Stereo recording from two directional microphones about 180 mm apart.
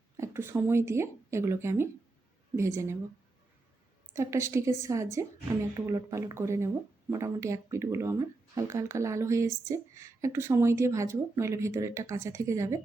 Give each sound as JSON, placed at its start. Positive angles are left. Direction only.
{"t": 0.2, "sound": "speech", "side_deg": -15}
{"t": 4.1, "sound": "speech", "side_deg": -15}